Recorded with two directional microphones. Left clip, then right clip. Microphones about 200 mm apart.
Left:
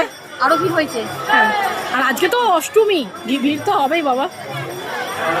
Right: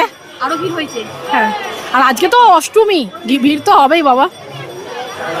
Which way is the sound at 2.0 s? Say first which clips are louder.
Right 9 dB; 35° right (ahead or behind).